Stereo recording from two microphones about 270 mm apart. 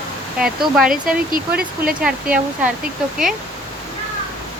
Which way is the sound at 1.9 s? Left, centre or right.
Centre.